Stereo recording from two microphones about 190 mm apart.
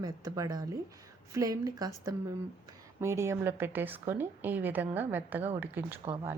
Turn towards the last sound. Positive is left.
turn(degrees=-10)  # may be behind; listen again after turning